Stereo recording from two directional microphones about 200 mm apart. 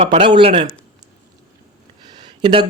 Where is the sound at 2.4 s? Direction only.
25° right (ahead or behind).